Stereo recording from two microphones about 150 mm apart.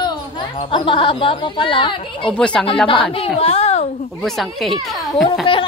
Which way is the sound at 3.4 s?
45° left (ahead or behind).